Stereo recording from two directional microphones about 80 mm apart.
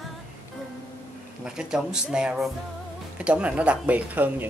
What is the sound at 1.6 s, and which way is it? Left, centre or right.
Speech, centre.